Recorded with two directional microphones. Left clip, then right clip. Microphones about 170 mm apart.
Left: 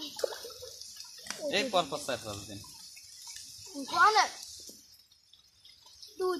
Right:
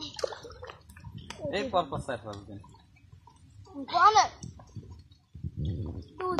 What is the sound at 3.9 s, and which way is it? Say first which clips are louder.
Speech: right 3 dB; 5° left (ahead or behind).